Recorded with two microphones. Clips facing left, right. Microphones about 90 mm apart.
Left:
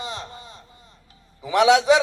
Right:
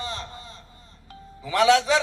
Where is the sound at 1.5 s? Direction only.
15° left (ahead or behind).